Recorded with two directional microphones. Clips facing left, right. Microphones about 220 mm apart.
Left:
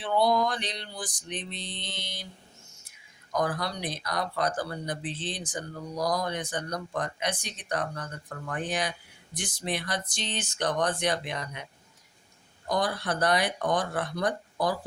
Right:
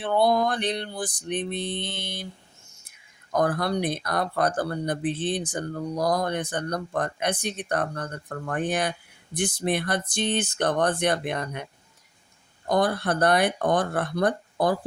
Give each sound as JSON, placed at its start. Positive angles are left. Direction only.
{"t": 0.0, "sound": "speech", "side_deg": -55}
{"t": 3.3, "sound": "speech", "side_deg": -55}